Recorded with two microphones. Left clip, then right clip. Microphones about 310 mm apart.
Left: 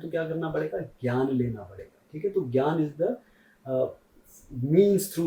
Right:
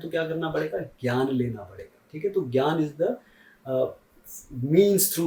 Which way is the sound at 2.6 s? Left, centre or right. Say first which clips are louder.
Right 2 dB; centre.